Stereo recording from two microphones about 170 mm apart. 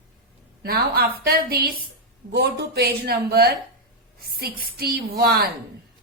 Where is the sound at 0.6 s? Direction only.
65° right (ahead or behind).